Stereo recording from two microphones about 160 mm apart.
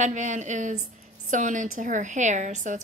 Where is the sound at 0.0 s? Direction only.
50° right (ahead or behind).